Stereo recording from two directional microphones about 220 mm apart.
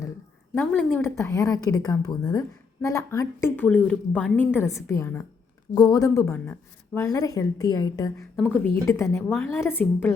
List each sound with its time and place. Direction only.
0.5 s speech: 5° left (ahead or behind)
8.4 s speech: 5° left (ahead or behind)